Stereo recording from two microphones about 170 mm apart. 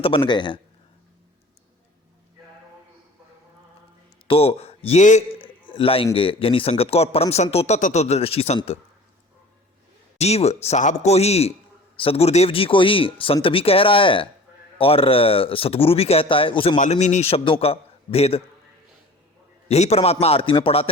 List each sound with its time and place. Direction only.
0.3 s a man's voice: 25° left (ahead or behind)
4.3 s a man's voice: 35° left (ahead or behind)
10.2 s speech: 40° left (ahead or behind)
16.7 s speech: 45° left (ahead or behind)
19.6 s speech: 40° left (ahead or behind)